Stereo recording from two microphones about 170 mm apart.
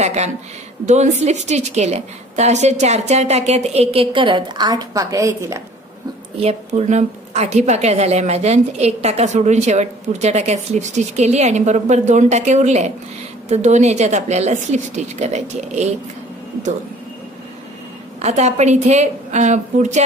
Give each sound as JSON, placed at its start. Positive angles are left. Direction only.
{"t": 0.0, "sound": "a woman's voice", "side_deg": -40}
{"t": 6.3, "sound": "a woman's voice", "side_deg": -40}
{"t": 18.2, "sound": "a woman's voice", "side_deg": -40}